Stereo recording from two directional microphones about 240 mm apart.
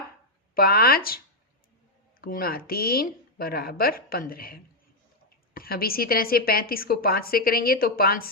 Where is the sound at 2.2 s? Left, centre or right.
Left.